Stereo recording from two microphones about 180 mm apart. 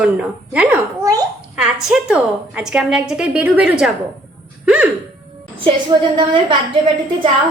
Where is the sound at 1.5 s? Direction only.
5° right (ahead or behind).